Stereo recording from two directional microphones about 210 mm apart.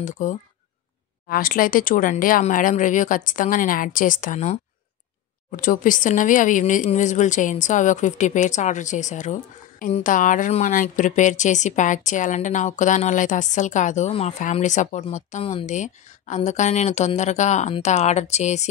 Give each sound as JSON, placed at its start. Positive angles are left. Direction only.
{"t": 0.0, "sound": "speech", "side_deg": 35}